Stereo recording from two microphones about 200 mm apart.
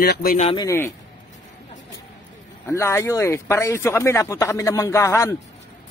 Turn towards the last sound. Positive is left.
turn(degrees=15)  # may be behind; listen again after turning